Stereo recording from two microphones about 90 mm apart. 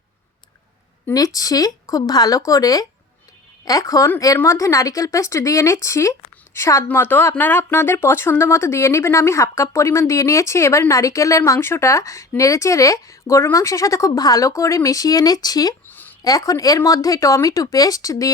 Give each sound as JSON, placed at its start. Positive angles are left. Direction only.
{"t": 1.1, "sound": "speech", "side_deg": 40}
{"t": 6.8, "sound": "speech", "side_deg": 25}
{"t": 15.9, "sound": "a sound", "side_deg": 20}
{"t": 16.2, "sound": "speech", "side_deg": 40}